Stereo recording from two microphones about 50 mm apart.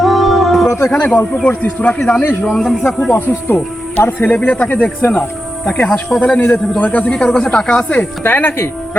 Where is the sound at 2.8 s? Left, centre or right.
Left.